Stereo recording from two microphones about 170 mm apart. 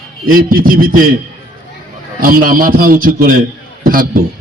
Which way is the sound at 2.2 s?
55° right (ahead or behind).